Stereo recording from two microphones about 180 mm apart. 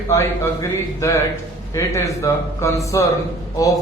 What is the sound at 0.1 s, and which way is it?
A man's voice, 15° left (ahead or behind).